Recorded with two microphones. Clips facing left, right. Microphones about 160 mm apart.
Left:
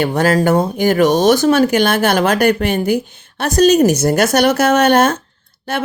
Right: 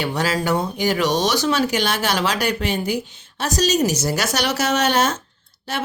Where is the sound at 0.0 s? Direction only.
50° left (ahead or behind).